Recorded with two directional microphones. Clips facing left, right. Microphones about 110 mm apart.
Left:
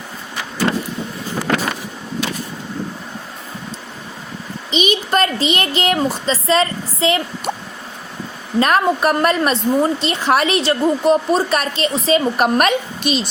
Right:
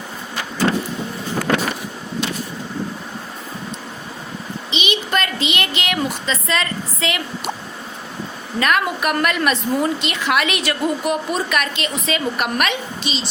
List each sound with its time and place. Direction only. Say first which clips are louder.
4.7 s speech: left 4 dB; 40° left (ahead or behind)
8.5 s a woman's voice: left 4 dB; 35° left (ahead or behind); by 13.2 s 50° left (ahead or behind)